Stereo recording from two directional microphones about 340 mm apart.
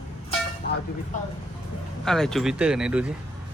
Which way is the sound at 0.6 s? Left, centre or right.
Left.